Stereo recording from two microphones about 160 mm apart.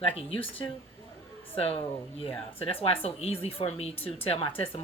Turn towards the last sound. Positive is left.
turn(degrees=35)  # may be behind; listen again after turning